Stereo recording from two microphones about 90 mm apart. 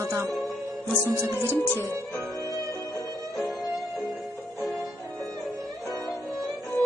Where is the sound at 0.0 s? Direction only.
30° right (ahead or behind).